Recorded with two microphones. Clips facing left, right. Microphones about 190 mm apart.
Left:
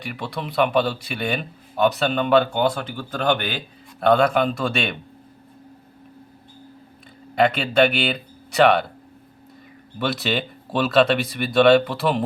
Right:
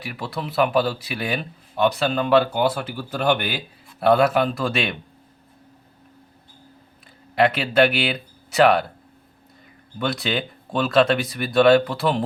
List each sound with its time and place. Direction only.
0.0 s speech: centre (ahead or behind)
7.3 s speech: centre (ahead or behind)
10.0 s speech: centre (ahead or behind)